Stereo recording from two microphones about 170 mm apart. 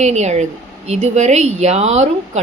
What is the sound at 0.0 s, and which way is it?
A woman's voice, 40° right (ahead or behind).